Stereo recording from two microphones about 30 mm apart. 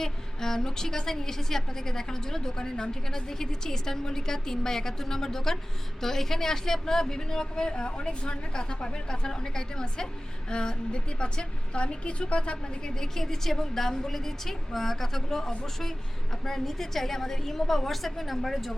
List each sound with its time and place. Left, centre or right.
0.0 s a woman's voice: centre; by 12.9 s left
12.9 s a woman's voice: centre